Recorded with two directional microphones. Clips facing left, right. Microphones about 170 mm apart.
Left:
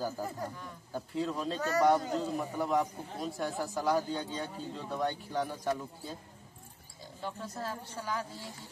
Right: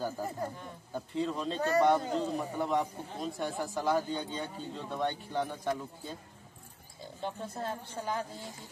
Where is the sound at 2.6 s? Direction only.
Centre (ahead or behind).